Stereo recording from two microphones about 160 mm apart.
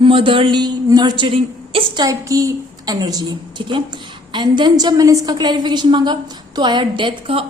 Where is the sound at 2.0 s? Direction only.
20° right (ahead or behind).